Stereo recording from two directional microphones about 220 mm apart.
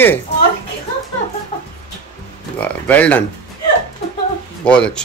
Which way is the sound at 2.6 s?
5° left (ahead or behind).